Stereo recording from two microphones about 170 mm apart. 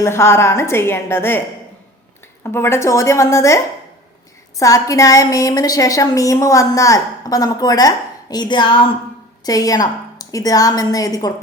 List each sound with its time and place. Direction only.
0.0 s a woman's voice: 15° left (ahead or behind)
2.4 s a woman's voice: 15° left (ahead or behind)
4.6 s a woman's voice: 20° left (ahead or behind)